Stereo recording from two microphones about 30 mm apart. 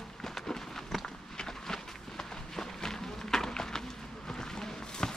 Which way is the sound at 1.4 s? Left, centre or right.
Centre.